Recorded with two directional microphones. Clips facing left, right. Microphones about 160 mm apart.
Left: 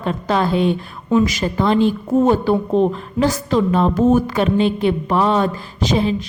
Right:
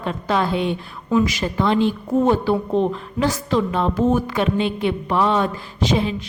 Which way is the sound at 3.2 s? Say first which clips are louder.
Left 3 dB; 40° left (ahead or behind).